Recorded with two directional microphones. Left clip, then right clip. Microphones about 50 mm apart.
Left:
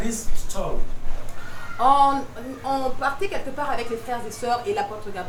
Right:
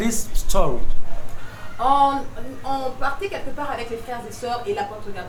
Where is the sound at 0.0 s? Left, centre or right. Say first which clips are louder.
Right 5 dB; right.